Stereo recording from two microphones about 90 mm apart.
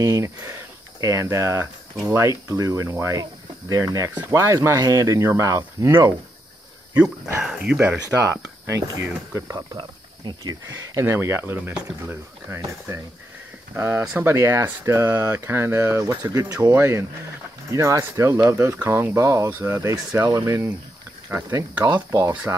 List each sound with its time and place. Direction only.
0.0 s speech: 45° right (ahead or behind)
7.4 s speech: 10° right (ahead or behind)
8.0 s speech: 35° right (ahead or behind)
9.8 s speech: 55° right (ahead or behind)
16.7 s speech: 30° right (ahead or behind)